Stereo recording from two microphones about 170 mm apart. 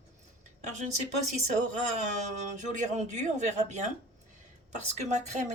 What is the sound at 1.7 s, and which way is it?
Speech, 45° right (ahead or behind).